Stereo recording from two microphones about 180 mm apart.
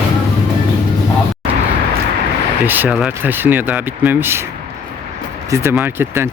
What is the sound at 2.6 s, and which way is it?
Speech, 10° right (ahead or behind).